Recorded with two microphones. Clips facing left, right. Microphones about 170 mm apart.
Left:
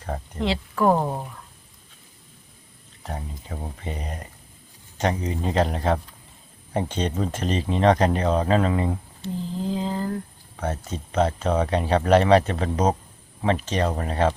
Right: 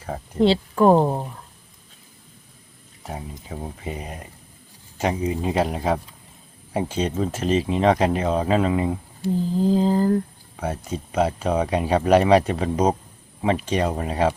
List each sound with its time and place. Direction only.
0.3 s speech: 30° right (ahead or behind)
3.0 s speech: 5° right (ahead or behind)
9.6 s a sound: 35° right (ahead or behind)
10.6 s speech: 10° right (ahead or behind)